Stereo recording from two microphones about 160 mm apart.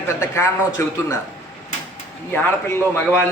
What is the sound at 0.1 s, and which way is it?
Speech, 15° left (ahead or behind).